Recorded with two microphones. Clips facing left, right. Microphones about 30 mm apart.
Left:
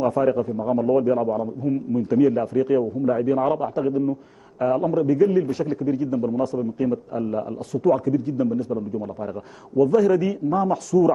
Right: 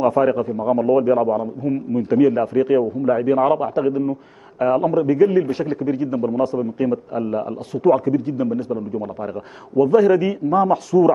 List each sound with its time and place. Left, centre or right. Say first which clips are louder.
0.0 s a man's voice: right 3 dB; right